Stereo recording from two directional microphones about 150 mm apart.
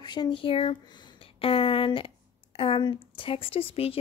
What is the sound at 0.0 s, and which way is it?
Speech, 30° left (ahead or behind).